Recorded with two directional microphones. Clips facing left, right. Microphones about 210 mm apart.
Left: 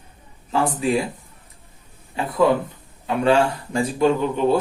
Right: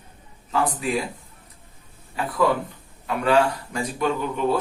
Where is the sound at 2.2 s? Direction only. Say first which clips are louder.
Left 4 dB; 25° left (ahead or behind).